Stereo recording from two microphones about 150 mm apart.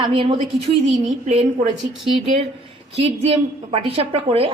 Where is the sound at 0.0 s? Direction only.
35° right (ahead or behind).